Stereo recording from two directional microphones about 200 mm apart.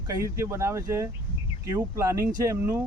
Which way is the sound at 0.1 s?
15° right (ahead or behind).